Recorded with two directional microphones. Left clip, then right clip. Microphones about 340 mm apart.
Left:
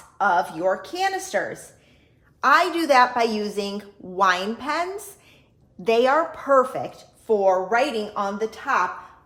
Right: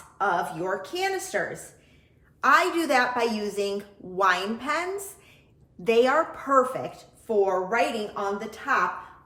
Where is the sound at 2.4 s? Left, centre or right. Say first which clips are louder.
Left 3 dB; left.